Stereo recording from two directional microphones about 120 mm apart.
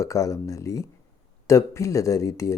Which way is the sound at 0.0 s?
25° left (ahead or behind).